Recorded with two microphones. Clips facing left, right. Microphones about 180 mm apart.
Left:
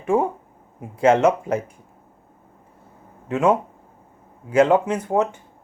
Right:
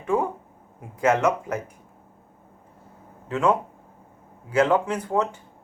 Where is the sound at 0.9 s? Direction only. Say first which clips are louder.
Left 5 dB; 30° left (ahead or behind).